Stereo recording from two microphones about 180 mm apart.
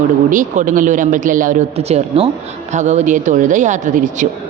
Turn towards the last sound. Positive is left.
turn(degrees=-45)  # may be behind; listen again after turning